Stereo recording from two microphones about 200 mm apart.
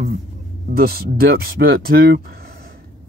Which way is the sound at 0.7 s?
50° right (ahead or behind).